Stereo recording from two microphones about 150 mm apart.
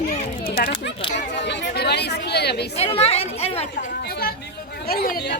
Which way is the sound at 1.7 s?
90° left.